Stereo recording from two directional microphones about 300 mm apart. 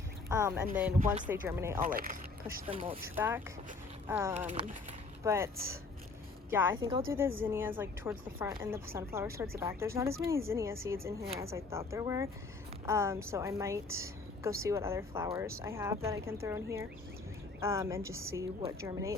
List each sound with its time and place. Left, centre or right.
0.3 s a woman's voice: centre
0.9 s speech: right
1.3 s a woman's voice: centre
1.8 s speech: right
3.2 s a woman's voice: centre
4.4 s speech: right
5.2 s a woman's voice: centre